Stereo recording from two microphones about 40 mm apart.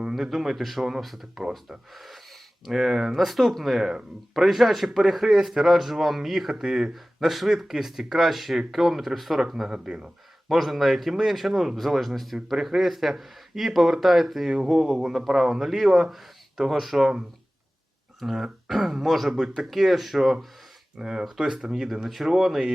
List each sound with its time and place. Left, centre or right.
0.2 s speech: centre
2.7 s a man's voice: centre
3.2 s a man's voice: centre
4.9 s a man's voice: centre
10.5 s speech: centre
14.5 s a man's voice: centre
18.2 s speech: centre
19.3 s speech: centre
19.7 s speech: centre
21.0 s a man's voice: centre